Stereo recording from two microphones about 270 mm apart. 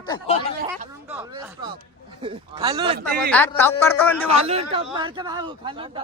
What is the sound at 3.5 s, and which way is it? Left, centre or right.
Speech, centre.